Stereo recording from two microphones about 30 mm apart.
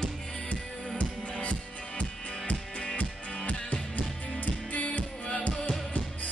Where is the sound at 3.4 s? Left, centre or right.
Left.